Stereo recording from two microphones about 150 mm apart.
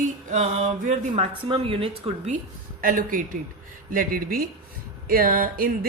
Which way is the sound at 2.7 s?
65° right (ahead or behind).